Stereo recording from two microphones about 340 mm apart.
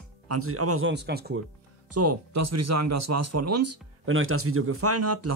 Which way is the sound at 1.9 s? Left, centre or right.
Right.